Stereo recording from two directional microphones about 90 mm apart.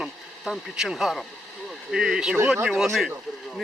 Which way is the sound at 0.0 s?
5° right (ahead or behind).